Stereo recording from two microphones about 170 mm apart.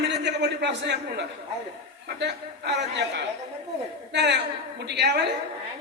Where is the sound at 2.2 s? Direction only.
80° right.